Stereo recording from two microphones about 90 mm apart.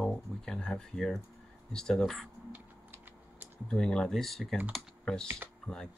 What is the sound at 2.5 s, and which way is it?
Typing, 20° right (ahead or behind).